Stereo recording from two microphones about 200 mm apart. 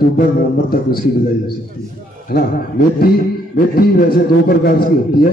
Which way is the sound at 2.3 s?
50° left (ahead or behind).